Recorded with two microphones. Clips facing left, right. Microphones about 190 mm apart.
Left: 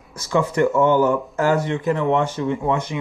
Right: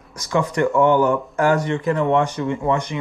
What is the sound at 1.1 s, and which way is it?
Speech, 5° left (ahead or behind).